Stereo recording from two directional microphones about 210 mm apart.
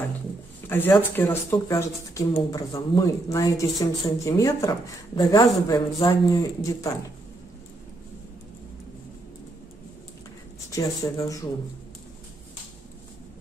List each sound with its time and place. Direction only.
0.7 s speech: 10° left (ahead or behind)
10.7 s speech: 15° left (ahead or behind)